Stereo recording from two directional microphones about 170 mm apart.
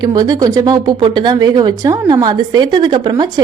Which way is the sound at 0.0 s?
25° right (ahead or behind).